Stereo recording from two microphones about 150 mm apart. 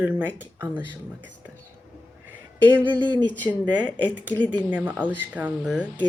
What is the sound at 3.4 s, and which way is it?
Speech, 10° right (ahead or behind).